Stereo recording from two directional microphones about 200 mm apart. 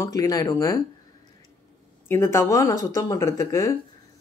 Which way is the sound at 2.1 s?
15° left (ahead or behind).